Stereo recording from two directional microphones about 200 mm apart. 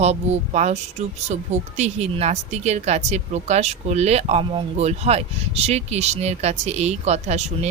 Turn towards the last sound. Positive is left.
turn(degrees=-35)  # may be behind; listen again after turning